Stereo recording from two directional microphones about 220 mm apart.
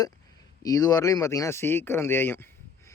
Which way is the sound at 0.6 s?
15° left (ahead or behind).